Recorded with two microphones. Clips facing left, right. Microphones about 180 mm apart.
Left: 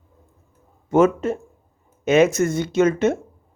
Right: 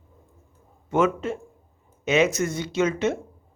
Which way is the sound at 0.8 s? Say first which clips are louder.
Left 6 dB; 40° left (ahead or behind).